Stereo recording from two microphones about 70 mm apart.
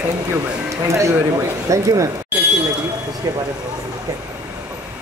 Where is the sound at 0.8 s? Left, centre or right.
Right.